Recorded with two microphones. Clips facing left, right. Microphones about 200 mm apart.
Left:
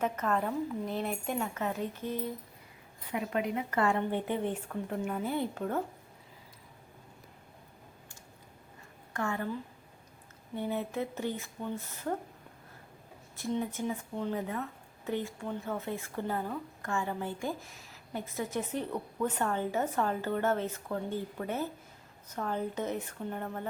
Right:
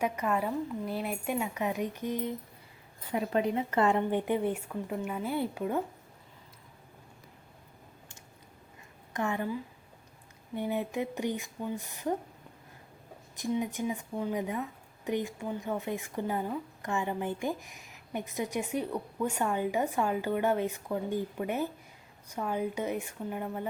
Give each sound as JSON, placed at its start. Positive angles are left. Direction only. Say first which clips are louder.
{"t": 0.0, "sound": "a woman's voice", "louder": "right 1 dB", "side_deg": -10}
{"t": 3.1, "sound": "a woman's voice", "louder": "right 3 dB", "side_deg": -30}
{"t": 9.1, "sound": "a woman's voice", "louder": "right 2 dB", "side_deg": -15}
{"t": 13.3, "sound": "a woman's voice", "louder": "right 2 dB", "side_deg": -15}